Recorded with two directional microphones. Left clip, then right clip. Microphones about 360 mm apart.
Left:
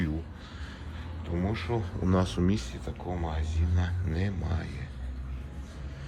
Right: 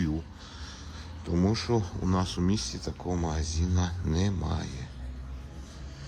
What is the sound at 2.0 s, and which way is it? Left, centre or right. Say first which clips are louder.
Speech: left 5 dB; centre.